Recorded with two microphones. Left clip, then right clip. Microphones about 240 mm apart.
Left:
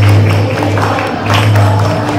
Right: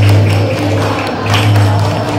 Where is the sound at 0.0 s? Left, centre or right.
Centre.